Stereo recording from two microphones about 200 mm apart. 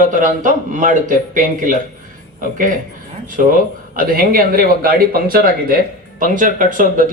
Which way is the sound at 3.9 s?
45° right (ahead or behind).